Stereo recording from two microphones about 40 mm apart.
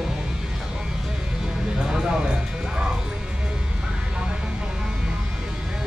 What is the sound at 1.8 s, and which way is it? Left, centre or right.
Music, centre.